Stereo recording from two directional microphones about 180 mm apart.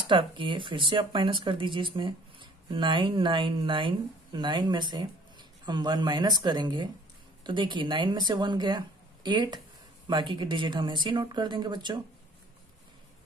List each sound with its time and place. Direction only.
0.0 s speech: 30° right (ahead or behind)